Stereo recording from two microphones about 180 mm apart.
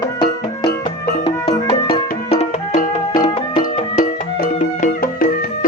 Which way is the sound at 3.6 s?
50° left (ahead or behind).